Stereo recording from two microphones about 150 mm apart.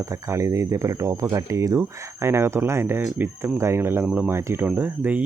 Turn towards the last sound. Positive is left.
turn(degrees=-10)  # may be behind; listen again after turning